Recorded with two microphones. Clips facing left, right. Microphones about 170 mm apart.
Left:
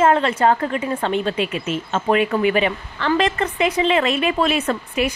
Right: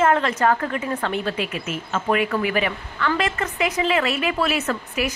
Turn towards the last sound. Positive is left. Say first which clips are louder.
# left 3 dB
turn(degrees=25)  # may be behind; listen again after turning